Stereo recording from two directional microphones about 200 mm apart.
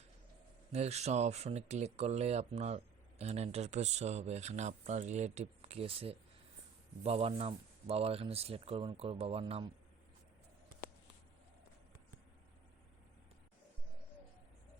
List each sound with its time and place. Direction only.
0.7 s speech: 30° right (ahead or behind)